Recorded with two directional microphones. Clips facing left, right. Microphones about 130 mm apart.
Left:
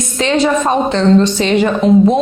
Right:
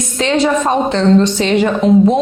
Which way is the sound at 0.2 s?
15° left (ahead or behind).